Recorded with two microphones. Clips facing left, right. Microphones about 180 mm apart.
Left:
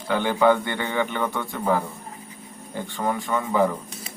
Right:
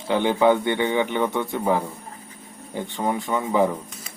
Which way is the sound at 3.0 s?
20° right (ahead or behind).